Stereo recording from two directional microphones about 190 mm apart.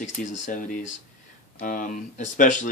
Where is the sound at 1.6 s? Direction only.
45° left (ahead or behind).